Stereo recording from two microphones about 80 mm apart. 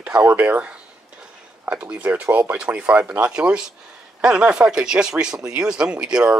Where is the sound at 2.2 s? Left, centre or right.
Right.